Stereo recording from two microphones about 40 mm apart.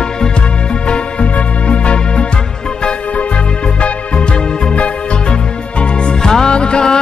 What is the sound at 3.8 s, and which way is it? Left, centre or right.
Music, left.